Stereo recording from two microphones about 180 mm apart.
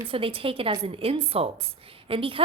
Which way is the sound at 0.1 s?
30° right (ahead or behind).